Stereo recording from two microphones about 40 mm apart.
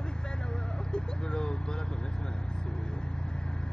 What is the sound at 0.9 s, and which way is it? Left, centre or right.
Vehicle, left.